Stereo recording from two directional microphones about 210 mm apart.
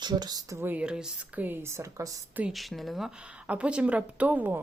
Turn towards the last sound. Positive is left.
turn(degrees=-10)  # may be behind; listen again after turning